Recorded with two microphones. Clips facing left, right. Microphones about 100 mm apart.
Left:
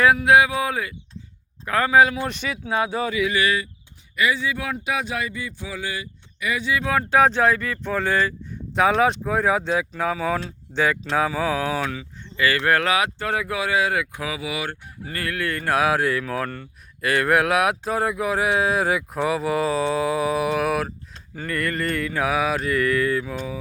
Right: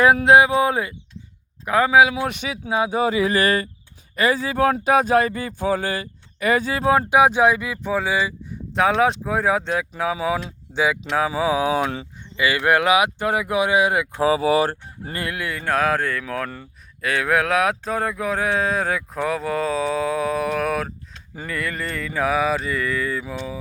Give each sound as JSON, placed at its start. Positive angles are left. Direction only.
{"t": 0.3, "sound": "speech", "side_deg": -25}
{"t": 1.6, "sound": "speech", "side_deg": -15}
{"t": 3.2, "sound": "goose", "side_deg": -40}
{"t": 4.1, "sound": "speech", "side_deg": -40}
{"t": 7.1, "sound": "speech", "side_deg": -10}
{"t": 11.8, "sound": "goose", "side_deg": -30}
{"t": 12.4, "sound": "speech", "side_deg": -15}
{"t": 14.2, "sound": "goose", "side_deg": -35}
{"t": 15.1, "sound": "speech", "side_deg": -20}
{"t": 15.5, "sound": "speech", "side_deg": 5}